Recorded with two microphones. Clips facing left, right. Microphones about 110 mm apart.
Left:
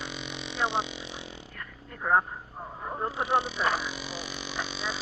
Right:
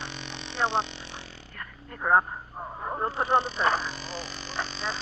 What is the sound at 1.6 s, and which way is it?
Dog, 50° right (ahead or behind).